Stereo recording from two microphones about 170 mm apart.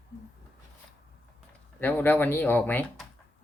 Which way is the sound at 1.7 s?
10° left (ahead or behind).